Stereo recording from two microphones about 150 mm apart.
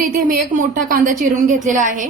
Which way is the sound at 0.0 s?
65° right (ahead or behind).